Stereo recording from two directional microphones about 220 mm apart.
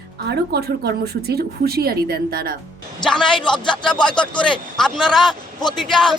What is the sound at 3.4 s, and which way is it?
Speech, 20° left (ahead or behind).